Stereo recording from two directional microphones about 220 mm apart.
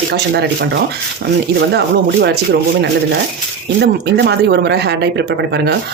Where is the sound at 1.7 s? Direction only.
50° right (ahead or behind).